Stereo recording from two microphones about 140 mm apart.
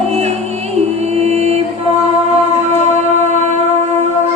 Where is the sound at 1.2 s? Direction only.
50° right (ahead or behind).